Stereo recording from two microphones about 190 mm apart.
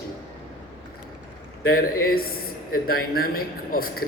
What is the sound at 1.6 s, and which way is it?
A man's voice, 50° left (ahead or behind).